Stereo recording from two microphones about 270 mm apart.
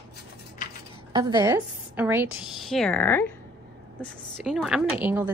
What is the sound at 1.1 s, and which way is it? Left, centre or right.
A woman's voice, centre.